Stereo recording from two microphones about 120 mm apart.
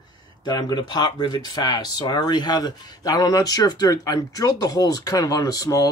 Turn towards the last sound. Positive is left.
turn(degrees=30)  # may be behind; listen again after turning